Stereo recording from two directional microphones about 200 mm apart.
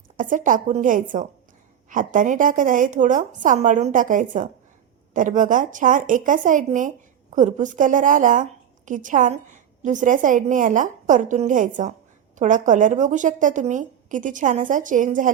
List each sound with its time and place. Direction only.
0.2 s speech: 40° right (ahead or behind)